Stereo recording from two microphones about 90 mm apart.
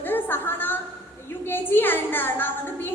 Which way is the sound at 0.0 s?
20° left (ahead or behind).